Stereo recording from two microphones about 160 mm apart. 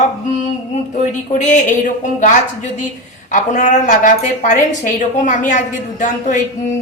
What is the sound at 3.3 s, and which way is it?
A woman's voice, 50° left (ahead or behind).